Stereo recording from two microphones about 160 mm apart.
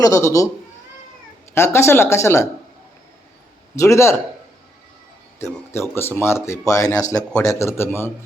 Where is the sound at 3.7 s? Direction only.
20° left (ahead or behind).